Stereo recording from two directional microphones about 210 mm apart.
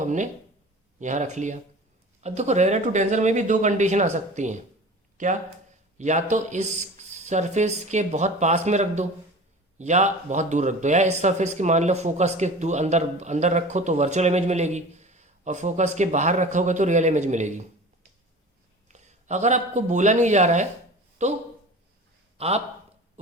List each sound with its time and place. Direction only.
0.0 s speech: 35° right (ahead or behind)
18.9 s speech: 35° right (ahead or behind)
22.4 s speech: 30° right (ahead or behind)